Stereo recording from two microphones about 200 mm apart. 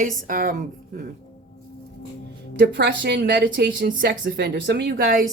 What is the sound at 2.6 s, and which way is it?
A woman's voice, 60° right (ahead or behind).